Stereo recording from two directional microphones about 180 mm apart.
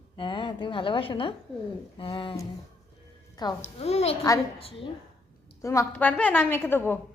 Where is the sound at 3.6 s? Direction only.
35° left (ahead or behind).